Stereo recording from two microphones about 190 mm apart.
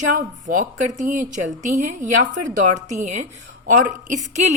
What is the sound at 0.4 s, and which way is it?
A woman's voice, 40° right (ahead or behind).